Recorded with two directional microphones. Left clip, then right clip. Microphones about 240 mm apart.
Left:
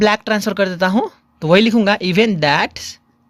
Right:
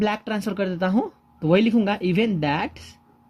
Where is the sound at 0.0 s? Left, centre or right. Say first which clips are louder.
Left 10 dB; left.